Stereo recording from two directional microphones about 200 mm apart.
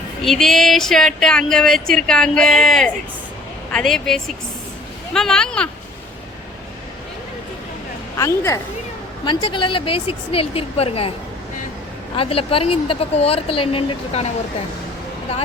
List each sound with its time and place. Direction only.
0.2 s speech: centre (ahead or behind)
8.1 s speech: 15° left (ahead or behind)
12.1 s speech: 25° left (ahead or behind)